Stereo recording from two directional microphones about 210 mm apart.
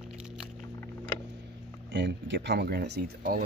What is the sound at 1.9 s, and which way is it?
Speech, 55° right (ahead or behind).